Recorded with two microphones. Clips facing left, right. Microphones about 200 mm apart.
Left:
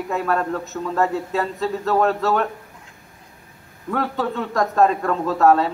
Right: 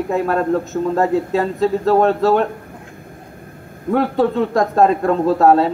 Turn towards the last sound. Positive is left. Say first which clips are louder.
# right 4 dB
turn(degrees=-35)  # may be behind; listen again after turning